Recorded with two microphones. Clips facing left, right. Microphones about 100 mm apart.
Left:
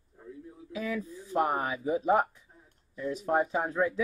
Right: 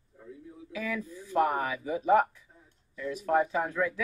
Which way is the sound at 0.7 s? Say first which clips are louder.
Left 1 dB; 30° left (ahead or behind).